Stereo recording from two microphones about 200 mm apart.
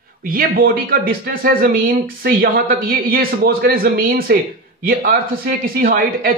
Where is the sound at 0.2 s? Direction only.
45° right (ahead or behind).